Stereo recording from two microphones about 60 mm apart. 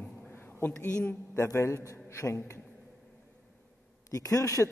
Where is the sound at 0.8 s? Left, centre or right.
Left.